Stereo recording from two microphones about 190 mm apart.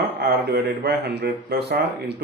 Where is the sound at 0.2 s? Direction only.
60° right (ahead or behind).